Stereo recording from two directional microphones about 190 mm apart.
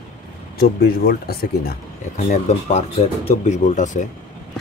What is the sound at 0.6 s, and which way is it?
Speech, 55° left (ahead or behind).